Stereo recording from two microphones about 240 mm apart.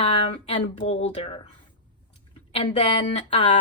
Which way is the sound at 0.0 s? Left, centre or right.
Left.